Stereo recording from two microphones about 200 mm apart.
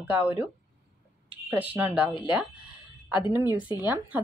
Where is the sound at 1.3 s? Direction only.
10° right (ahead or behind).